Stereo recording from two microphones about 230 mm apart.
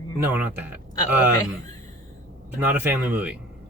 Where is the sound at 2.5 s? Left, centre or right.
Centre.